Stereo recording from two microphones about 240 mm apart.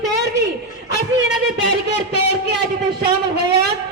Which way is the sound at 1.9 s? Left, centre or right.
Right.